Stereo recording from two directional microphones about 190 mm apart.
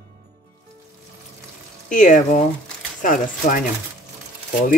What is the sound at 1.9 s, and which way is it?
Speech, 40° left (ahead or behind).